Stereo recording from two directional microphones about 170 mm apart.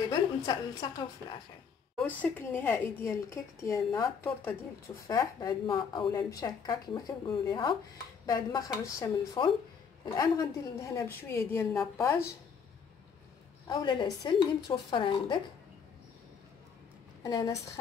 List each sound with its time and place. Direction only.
0.1 s a woman's voice: 25° left (ahead or behind)
2.0 s a woman's voice: 10° left (ahead or behind)
13.7 s a woman's voice: 25° left (ahead or behind)
17.2 s a woman's voice: 20° left (ahead or behind)